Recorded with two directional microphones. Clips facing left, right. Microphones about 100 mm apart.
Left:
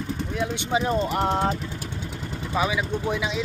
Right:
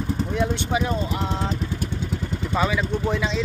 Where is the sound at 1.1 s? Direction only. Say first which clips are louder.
Left 4 dB; 50° left (ahead or behind).